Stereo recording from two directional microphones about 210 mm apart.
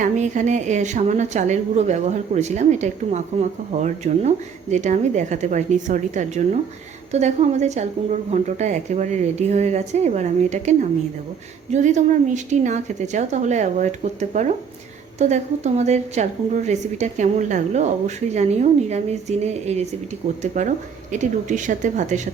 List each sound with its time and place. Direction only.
0.0 s a woman's voice: 35° right (ahead or behind)